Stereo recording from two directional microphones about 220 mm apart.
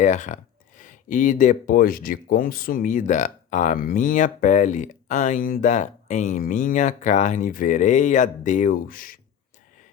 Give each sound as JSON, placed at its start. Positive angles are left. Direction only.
{"t": 0.0, "sound": "speech", "side_deg": 35}